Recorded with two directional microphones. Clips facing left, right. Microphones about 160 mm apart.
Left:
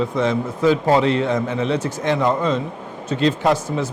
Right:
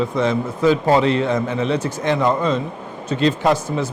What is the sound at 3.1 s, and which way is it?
Speech, 15° right (ahead or behind).